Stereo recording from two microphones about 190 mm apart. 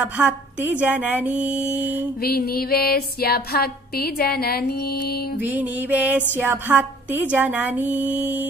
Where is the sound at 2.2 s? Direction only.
55° left (ahead or behind).